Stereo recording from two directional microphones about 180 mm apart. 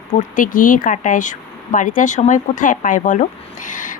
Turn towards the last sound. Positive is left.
turn(degrees=45)  # may be behind; listen again after turning